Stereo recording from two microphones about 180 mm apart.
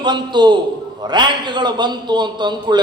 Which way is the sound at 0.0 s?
25° right (ahead or behind).